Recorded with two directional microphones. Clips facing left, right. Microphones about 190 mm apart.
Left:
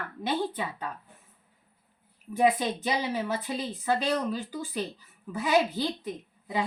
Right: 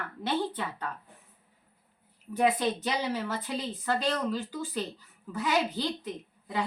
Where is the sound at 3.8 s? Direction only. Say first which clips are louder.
Left 2 dB; 15° left (ahead or behind).